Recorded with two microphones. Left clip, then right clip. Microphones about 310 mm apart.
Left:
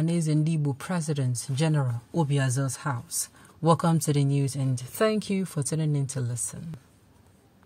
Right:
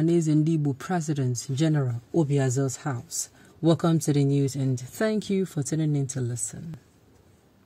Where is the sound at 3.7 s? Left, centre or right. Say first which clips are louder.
Even; centre.